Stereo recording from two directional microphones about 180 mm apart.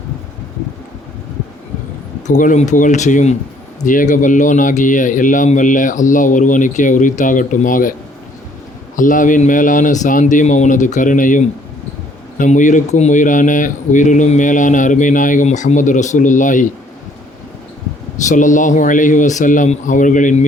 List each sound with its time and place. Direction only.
2.2 s speech: 45° left (ahead or behind)
9.0 s speech: 45° left (ahead or behind)
18.3 s speech: 45° left (ahead or behind)